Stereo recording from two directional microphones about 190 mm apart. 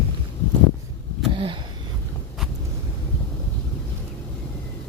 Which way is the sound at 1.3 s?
25° right (ahead or behind).